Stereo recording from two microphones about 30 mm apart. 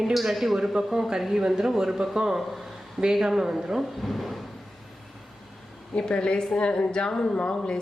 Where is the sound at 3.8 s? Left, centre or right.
Centre.